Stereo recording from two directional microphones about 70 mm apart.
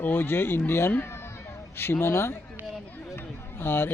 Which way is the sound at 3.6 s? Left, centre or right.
Left.